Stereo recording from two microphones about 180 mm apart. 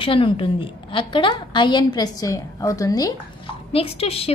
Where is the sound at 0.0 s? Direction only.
30° left (ahead or behind).